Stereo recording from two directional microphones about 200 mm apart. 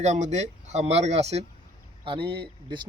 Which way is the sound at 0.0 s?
35° right (ahead or behind).